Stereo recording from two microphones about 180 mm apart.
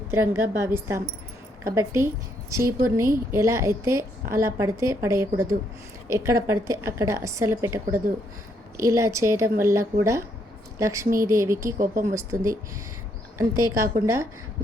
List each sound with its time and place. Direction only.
0.1 s a woman's voice: 15° right (ahead or behind)
11.8 s speech: 50° right (ahead or behind)
12.1 s a woman's voice: 15° right (ahead or behind)
13.6 s a woman's voice: 15° right (ahead or behind)